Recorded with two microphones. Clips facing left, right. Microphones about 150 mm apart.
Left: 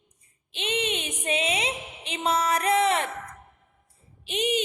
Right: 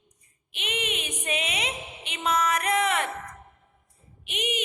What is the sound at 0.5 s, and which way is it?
Speech, 30° left (ahead or behind).